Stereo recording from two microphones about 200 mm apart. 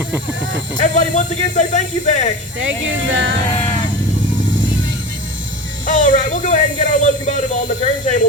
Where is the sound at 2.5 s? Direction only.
70° right (ahead or behind).